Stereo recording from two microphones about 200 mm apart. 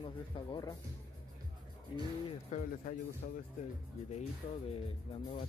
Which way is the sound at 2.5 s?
40° left (ahead or behind).